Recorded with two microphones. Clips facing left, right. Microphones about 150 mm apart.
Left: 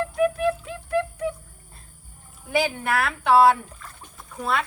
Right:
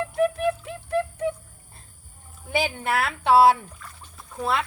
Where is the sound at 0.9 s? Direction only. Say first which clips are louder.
Even; 25° right (ahead or behind).